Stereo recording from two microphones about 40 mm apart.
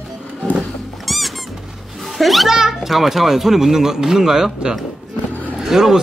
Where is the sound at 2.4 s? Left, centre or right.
Centre.